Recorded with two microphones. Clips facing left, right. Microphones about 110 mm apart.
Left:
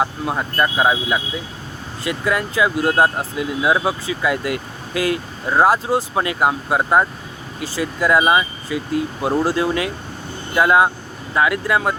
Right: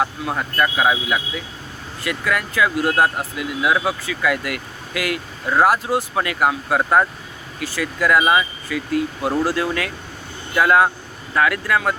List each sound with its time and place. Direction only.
0.0 s speech: 20° left (ahead or behind)